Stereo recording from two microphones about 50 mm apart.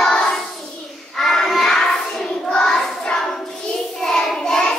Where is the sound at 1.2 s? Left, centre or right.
Centre.